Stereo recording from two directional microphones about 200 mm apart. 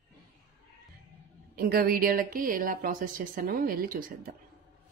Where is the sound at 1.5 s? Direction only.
50° right (ahead or behind).